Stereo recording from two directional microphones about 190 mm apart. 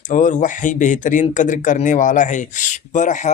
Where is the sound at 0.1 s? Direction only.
40° left (ahead or behind).